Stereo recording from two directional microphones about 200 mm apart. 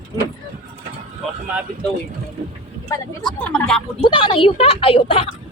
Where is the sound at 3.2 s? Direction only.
5° left (ahead or behind).